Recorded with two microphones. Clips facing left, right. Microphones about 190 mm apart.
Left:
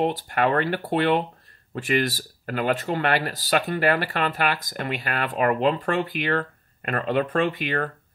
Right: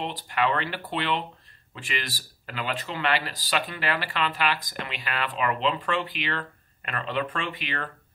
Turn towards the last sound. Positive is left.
turn(degrees=45)  # may be behind; listen again after turning